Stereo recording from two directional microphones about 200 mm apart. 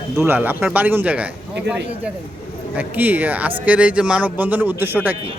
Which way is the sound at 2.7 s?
10° right (ahead or behind).